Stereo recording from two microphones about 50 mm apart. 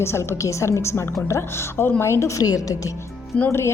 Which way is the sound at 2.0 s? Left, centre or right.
Left.